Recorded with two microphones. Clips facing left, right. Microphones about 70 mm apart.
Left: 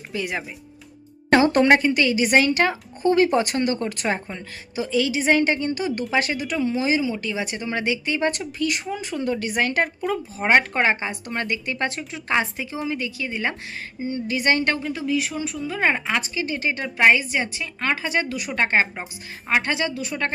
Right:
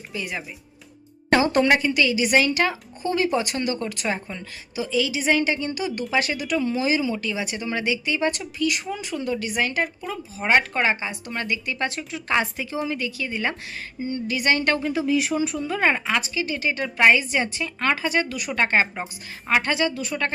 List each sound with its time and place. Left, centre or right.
0.1 s speech: left
1.3 s a woman's voice: left
10.4 s a woman's voice: left
12.3 s speech: left
14.3 s a woman's voice: left
14.9 s speech: centre
15.8 s a woman's voice: centre
16.2 s a woman's voice: left
17.0 s a woman's voice: left
18.0 s a woman's voice: left